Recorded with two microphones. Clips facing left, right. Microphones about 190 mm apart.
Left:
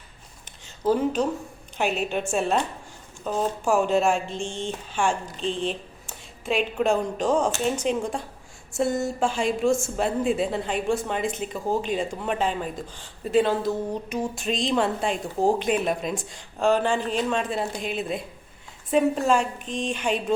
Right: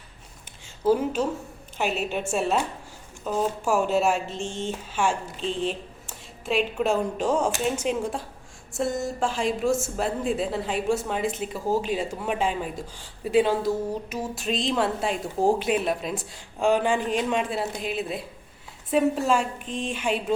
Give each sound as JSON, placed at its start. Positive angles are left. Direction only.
{"t": 0.9, "sound": "a woman's voice", "side_deg": -5}